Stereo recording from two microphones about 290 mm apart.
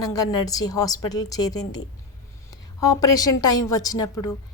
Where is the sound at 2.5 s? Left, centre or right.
Left.